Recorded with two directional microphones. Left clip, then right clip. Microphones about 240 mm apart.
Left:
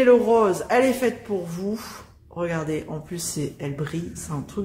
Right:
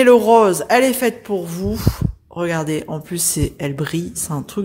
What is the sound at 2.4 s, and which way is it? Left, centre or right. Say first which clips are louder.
A woman's voice: right 6 dB; right.